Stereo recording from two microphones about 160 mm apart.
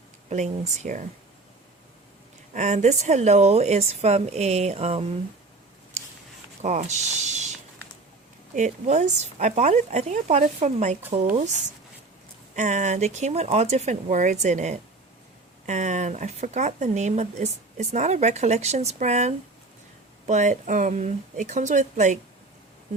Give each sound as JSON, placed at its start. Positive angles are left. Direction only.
{"t": 0.3, "sound": "speech", "side_deg": -45}
{"t": 2.5, "sound": "speech", "side_deg": -50}
{"t": 6.6, "sound": "speech", "side_deg": -45}
{"t": 8.5, "sound": "speech", "side_deg": -45}
{"t": 12.5, "sound": "speech", "side_deg": -50}